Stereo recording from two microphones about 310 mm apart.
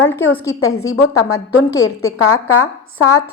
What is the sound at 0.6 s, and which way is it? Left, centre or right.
A woman's voice, left.